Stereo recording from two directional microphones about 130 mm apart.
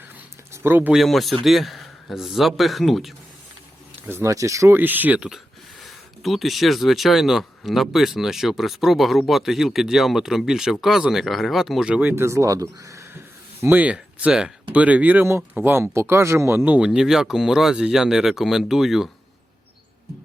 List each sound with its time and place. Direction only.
0.5 s speech: 15° right (ahead or behind)
0.9 s speech: centre (ahead or behind)
4.0 s speech: 20° right (ahead or behind); by 19.0 s centre (ahead or behind)